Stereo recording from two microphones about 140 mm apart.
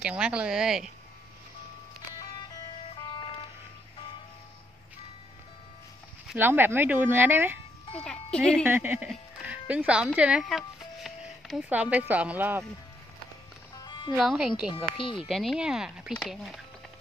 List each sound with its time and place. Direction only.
0.0 s speech: 10° right (ahead or behind)
2.9 s music: 35° left (ahead or behind)
6.3 s speech: 15° right (ahead or behind)
8.0 s speech: 5° left (ahead or behind)
8.6 s speech: 15° right (ahead or behind)
13.8 s music: 35° left (ahead or behind)
14.1 s speech: centre (ahead or behind)
15.0 s speech: 35° left (ahead or behind)
15.2 s speech: centre (ahead or behind)